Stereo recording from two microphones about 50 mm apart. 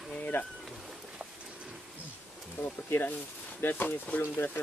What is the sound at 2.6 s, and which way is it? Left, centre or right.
Speech, left.